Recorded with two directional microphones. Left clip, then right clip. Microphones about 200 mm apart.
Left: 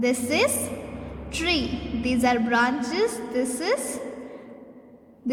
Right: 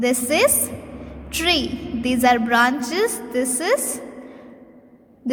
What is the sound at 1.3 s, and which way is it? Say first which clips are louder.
A woman's voice: right 5 dB; 20° right (ahead or behind).